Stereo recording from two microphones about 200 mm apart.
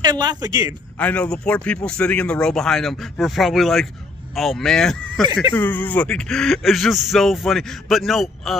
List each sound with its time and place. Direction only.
0.0 s speech: 20° right (ahead or behind)
0.9 s speech: 5° left (ahead or behind)